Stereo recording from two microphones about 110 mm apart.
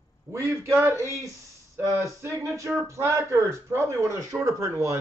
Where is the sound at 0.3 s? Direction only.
30° right (ahead or behind).